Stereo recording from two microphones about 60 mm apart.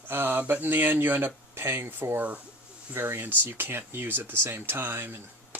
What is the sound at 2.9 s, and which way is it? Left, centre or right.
Speech, right.